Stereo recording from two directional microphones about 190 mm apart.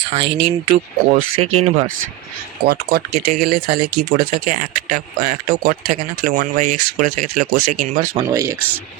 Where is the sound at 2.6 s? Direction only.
55° right (ahead or behind).